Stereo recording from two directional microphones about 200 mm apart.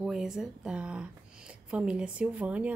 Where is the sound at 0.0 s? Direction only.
5° right (ahead or behind).